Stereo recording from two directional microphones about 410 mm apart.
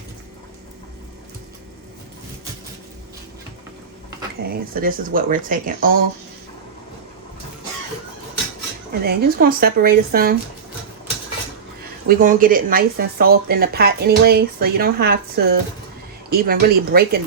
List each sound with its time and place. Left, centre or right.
4.4 s speech: right
8.9 s speech: right
12.0 s speech: centre